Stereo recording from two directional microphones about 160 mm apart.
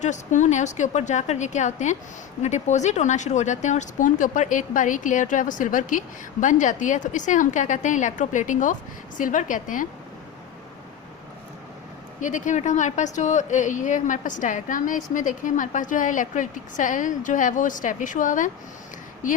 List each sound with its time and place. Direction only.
0.0 s a woman's voice: 50° left (ahead or behind)
12.2 s speech: 50° left (ahead or behind)